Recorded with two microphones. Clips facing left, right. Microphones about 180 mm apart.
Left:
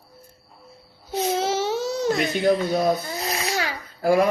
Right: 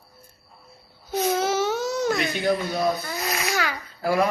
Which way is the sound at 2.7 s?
35° left (ahead or behind).